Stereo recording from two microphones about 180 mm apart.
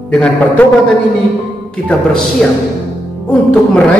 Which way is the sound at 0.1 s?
5° left (ahead or behind).